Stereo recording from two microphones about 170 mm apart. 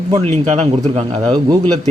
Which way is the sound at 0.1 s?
40° right (ahead or behind).